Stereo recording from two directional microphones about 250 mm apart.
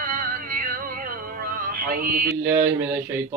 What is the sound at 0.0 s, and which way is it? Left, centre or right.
Music, right.